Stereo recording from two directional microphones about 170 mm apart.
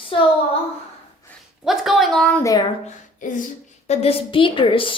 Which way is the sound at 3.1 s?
50° left (ahead or behind).